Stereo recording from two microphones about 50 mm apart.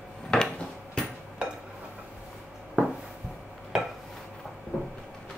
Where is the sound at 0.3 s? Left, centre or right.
Centre.